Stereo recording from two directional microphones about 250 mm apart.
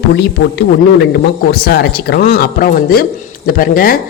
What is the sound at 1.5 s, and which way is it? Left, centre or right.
Speech, left.